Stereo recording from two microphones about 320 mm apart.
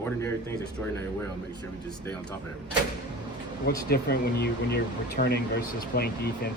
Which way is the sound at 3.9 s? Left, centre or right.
Left.